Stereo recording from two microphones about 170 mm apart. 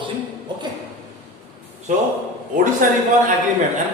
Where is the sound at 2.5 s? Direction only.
50° right (ahead or behind).